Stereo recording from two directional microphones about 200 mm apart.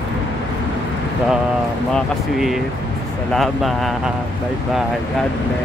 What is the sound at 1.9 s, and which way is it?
Speech, centre (ahead or behind).